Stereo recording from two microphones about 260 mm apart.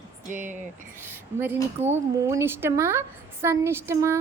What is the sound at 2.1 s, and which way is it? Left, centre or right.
A woman's voice, centre.